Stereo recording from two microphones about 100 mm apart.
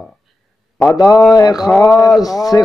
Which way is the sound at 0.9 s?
40° left (ahead or behind).